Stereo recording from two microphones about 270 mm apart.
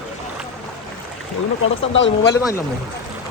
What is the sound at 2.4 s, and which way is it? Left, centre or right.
Speech, centre.